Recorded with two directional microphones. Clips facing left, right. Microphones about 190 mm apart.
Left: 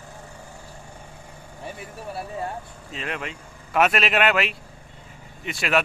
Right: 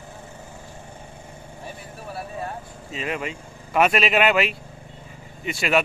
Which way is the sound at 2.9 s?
5° right (ahead or behind).